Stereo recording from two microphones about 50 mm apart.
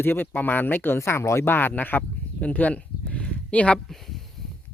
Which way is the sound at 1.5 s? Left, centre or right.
Left.